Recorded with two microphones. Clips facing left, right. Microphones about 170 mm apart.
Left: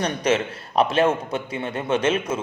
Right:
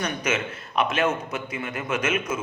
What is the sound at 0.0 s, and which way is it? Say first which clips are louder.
A man's voice: left 5 dB; 35° left (ahead or behind).